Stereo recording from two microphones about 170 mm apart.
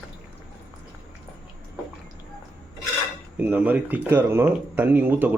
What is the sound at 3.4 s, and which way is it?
Speech, 10° right (ahead or behind).